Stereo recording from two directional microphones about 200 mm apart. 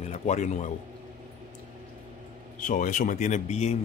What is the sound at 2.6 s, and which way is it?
Speech, 40° left (ahead or behind).